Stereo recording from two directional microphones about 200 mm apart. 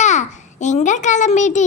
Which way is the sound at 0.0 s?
35° left (ahead or behind).